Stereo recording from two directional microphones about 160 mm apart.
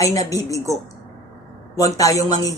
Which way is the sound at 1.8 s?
20° left (ahead or behind).